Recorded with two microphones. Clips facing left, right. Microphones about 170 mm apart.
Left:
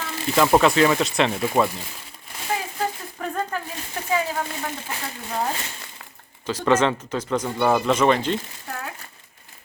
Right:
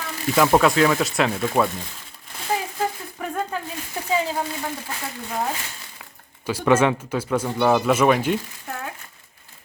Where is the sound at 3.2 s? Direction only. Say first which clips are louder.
Even; 10° right (ahead or behind).